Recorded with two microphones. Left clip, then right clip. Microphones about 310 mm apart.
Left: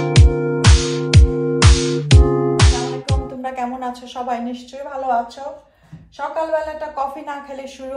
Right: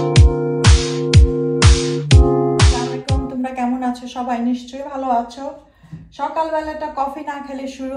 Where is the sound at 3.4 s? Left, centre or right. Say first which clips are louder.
Right 2 dB; left.